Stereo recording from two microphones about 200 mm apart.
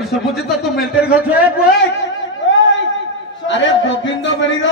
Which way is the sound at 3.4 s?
65° left (ahead or behind).